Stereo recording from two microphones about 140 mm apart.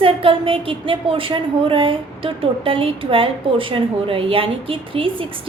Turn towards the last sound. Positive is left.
turn(degrees=-40)  # may be behind; listen again after turning